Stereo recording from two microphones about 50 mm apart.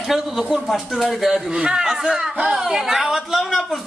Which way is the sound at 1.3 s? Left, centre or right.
Centre.